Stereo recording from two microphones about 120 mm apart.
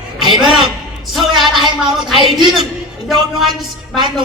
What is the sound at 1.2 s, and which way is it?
Speech, centre (ahead or behind).